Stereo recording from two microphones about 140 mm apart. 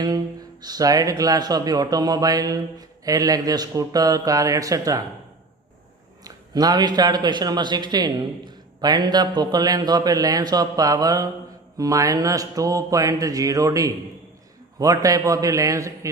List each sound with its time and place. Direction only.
0.0 s speech: 30° right (ahead or behind)
6.2 s speech: 25° right (ahead or behind)